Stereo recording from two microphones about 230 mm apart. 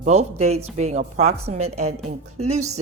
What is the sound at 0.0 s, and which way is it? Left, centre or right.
Speech, right.